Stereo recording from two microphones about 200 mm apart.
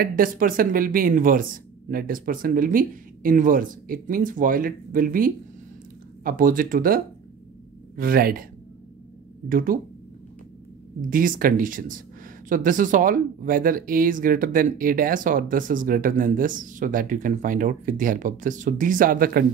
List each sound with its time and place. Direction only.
0.0 s speech: 45° right (ahead or behind)
9.5 s speech: 45° right (ahead or behind)
11.0 s speech: 45° right (ahead or behind)